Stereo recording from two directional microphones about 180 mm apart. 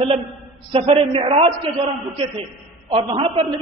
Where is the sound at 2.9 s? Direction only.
30° right (ahead or behind).